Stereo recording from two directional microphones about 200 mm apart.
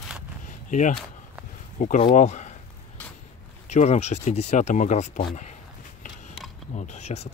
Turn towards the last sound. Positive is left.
turn(degrees=35)  # may be behind; listen again after turning